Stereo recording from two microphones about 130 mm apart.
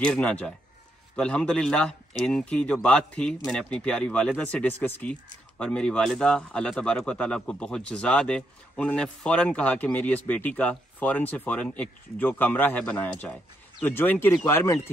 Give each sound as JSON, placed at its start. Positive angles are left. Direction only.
{"t": 0.0, "sound": "speech", "side_deg": 10}